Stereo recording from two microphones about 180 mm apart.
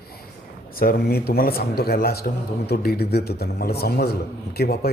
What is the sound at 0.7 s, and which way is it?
A man's voice, 55° left (ahead or behind).